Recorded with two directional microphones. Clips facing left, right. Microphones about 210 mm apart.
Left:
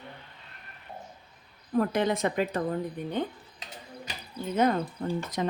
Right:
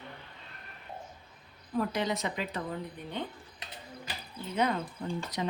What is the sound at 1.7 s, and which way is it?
Speech, 50° left (ahead or behind).